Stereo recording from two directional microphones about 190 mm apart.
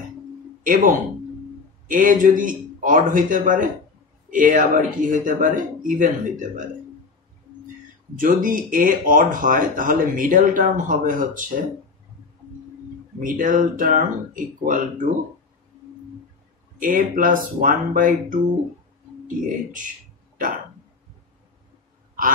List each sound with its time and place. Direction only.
0.7 s speech: 45° right (ahead or behind)
8.2 s speech: 45° right (ahead or behind)
13.2 s speech: 45° right (ahead or behind)
16.9 s speech: 45° right (ahead or behind)